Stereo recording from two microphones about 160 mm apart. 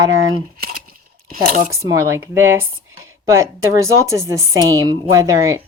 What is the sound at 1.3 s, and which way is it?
Speech, 55° right (ahead or behind).